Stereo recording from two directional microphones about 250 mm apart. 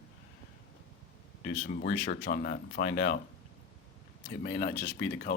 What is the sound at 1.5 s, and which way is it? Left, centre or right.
Speech, left.